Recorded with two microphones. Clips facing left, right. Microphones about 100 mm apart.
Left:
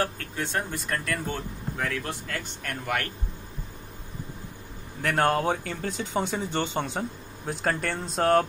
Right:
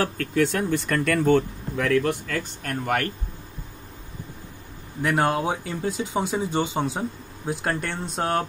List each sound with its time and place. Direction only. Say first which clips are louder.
0.2 s speech: right 8 dB; 90° right; by 2.1 s 75° right (ahead or behind)
2.4 s speech: right 5 dB; 40° right (ahead or behind)
5.0 s speech: right 1 dB; 10° right (ahead or behind)